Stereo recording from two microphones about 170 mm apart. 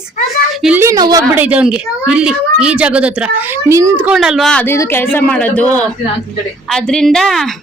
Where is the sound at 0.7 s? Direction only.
20° right (ahead or behind).